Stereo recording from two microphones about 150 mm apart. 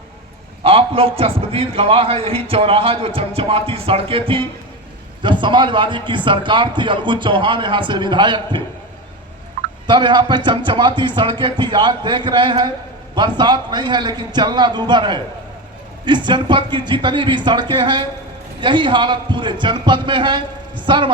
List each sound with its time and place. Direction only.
0.6 s a man's voice: 40° right (ahead or behind)
9.8 s a man's voice: 30° right (ahead or behind)